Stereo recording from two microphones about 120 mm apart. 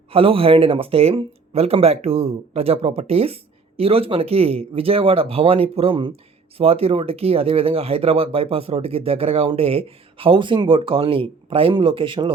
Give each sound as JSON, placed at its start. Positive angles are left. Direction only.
{"t": 0.1, "sound": "speech", "side_deg": -50}